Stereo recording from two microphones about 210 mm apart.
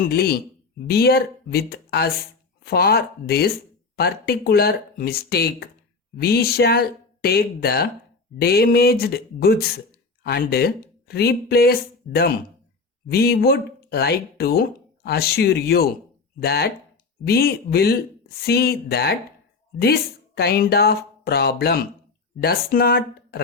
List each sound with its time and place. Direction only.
0.1 s speech: 50° left (ahead or behind)